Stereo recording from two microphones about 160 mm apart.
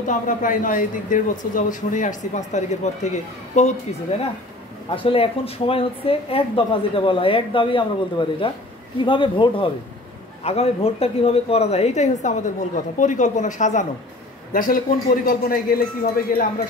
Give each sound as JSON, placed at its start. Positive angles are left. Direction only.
{"t": 0.0, "sound": "a man's voice", "side_deg": 55}
{"t": 4.8, "sound": "a man's voice", "side_deg": 35}